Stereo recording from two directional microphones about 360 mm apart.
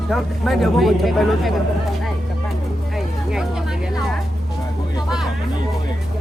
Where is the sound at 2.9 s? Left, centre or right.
Centre.